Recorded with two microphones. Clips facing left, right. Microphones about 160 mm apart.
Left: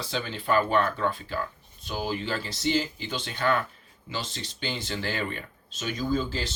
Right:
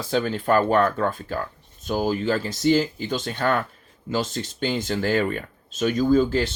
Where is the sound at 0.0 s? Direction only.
50° right (ahead or behind).